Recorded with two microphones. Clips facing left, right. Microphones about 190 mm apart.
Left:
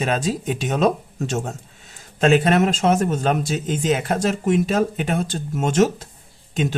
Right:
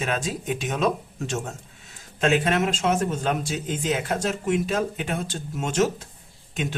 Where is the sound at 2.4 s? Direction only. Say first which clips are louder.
Left 5 dB; 45° left (ahead or behind).